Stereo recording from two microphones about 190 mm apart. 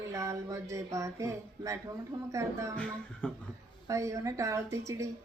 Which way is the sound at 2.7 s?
5° left (ahead or behind).